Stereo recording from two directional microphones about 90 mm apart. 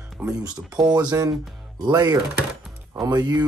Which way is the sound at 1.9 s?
50° right (ahead or behind).